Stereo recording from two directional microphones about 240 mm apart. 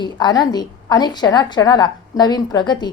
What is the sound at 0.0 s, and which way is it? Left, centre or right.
A woman's voice, centre.